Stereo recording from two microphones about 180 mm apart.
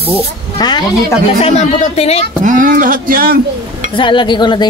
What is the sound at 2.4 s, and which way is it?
Speech, 45° right (ahead or behind).